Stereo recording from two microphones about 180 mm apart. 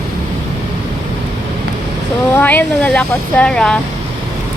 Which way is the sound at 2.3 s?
10° left (ahead or behind).